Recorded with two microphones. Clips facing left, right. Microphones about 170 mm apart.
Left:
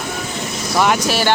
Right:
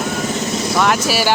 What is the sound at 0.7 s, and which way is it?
Speech, centre (ahead or behind).